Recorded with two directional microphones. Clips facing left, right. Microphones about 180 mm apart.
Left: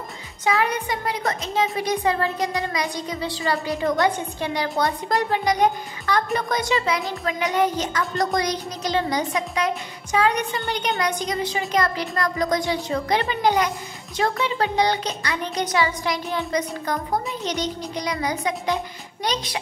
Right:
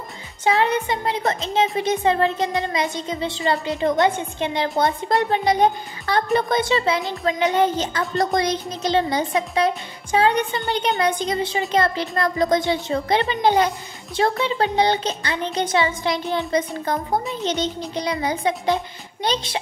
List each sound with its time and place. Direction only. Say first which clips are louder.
0.5 s a woman's voice: right 3 dB; 25° right (ahead or behind)